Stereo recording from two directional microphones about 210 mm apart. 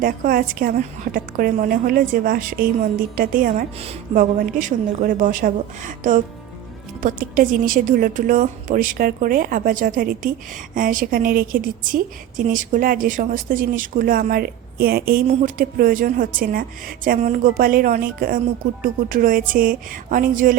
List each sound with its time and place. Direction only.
0.0 s a woman's voice: 40° right (ahead or behind)